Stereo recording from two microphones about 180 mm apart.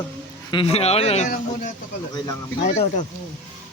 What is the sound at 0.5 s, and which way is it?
Speech, 35° left (ahead or behind).